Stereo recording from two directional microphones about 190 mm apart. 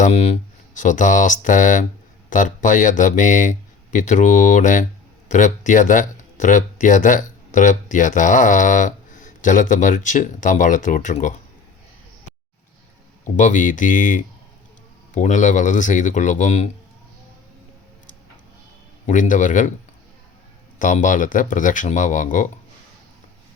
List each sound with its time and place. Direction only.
0.0 s speech: 35° left (ahead or behind)
13.3 s speech: 40° left (ahead or behind)
19.0 s speech: 40° left (ahead or behind)
20.7 s speech: 45° left (ahead or behind)